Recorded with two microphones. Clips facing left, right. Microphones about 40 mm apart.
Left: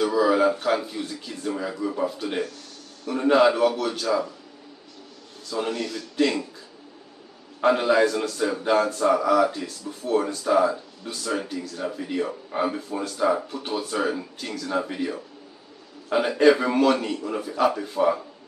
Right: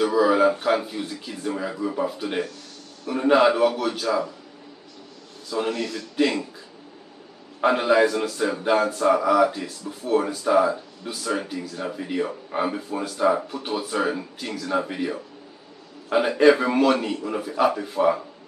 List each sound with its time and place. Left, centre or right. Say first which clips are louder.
0.0 s speech: right 1 dB; centre
5.5 s speech: right 2 dB; centre
7.6 s speech: right 1 dB; centre